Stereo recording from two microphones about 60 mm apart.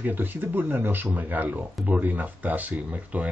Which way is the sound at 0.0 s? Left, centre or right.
Right.